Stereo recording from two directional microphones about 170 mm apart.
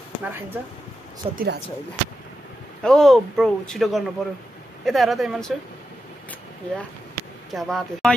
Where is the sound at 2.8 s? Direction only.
5° left (ahead or behind).